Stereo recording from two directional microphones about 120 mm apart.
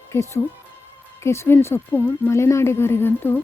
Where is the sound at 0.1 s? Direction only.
25° left (ahead or behind).